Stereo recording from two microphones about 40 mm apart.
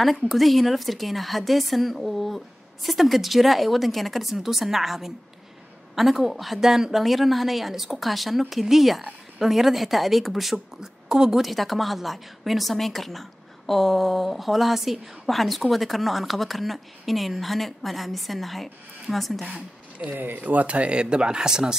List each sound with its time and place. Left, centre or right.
0.4 s speech: centre
11.1 s a woman's voice: centre
11.4 s speech: centre
20.1 s speech: right; by 21.7 s centre